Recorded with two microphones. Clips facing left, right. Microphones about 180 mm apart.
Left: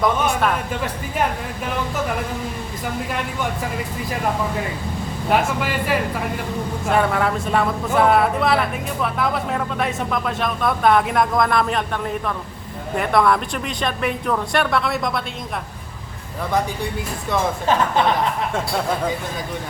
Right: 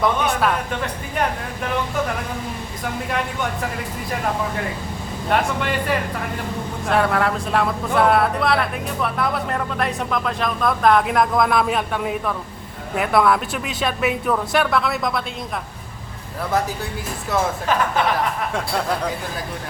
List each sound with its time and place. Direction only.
0.0 s speech: centre (ahead or behind)
5.3 s speech: 5° left (ahead or behind)
6.8 s speech: centre (ahead or behind)
17.7 s speech: 25° left (ahead or behind)
18.5 s speech: centre (ahead or behind)